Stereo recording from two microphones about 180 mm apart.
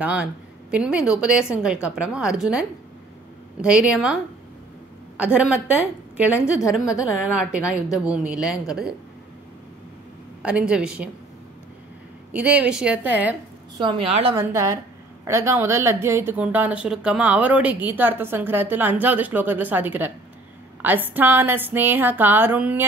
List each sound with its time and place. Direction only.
0.0 s speech: 5° right (ahead or behind)
3.6 s a woman's voice: 5° right (ahead or behind)
10.4 s speech: 5° right (ahead or behind)
12.3 s a woman's voice: 5° right (ahead or behind)
13.7 s a woman's voice: 30° right (ahead or behind)
14.3 s a woman's voice: 15° right (ahead or behind)